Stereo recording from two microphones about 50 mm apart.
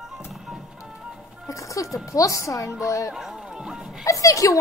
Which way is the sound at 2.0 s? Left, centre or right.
Left.